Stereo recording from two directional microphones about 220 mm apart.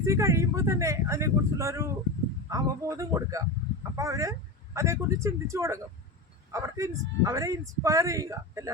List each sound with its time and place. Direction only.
0.0 s speech: 15° right (ahead or behind)